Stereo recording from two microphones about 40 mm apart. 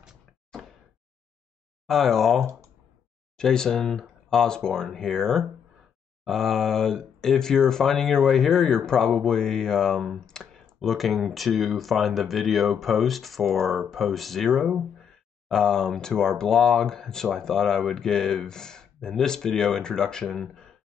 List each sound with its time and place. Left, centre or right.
1.9 s speech: centre
15.0 s speech: centre